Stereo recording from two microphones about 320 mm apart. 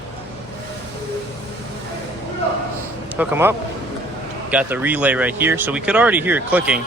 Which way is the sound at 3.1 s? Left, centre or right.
Centre.